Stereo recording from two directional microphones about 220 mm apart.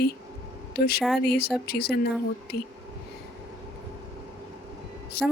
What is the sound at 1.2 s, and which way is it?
Speech, 45° left (ahead or behind).